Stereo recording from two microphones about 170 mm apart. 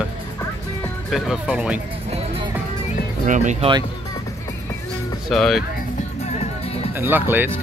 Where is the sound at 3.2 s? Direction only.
45° right (ahead or behind).